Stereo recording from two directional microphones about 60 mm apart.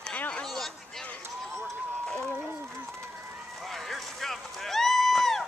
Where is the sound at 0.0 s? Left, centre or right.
Centre.